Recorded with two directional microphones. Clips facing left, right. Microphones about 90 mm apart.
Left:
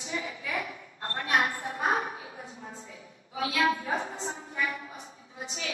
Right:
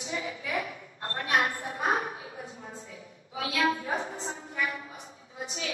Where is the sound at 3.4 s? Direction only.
30° left (ahead or behind).